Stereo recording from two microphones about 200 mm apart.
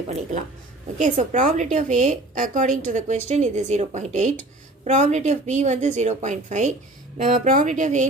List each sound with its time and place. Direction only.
0.1 s a woman's voice: 40° right (ahead or behind)